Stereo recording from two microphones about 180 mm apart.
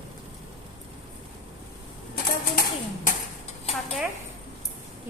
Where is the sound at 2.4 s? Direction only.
50° left (ahead or behind).